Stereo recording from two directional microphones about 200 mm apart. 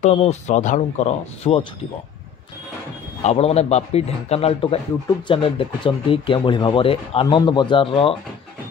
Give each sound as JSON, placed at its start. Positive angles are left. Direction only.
{"t": 0.0, "sound": "speech", "side_deg": 35}
{"t": 3.2, "sound": "speech", "side_deg": 30}